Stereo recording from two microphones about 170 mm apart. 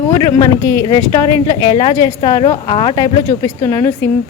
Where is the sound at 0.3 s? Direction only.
20° left (ahead or behind).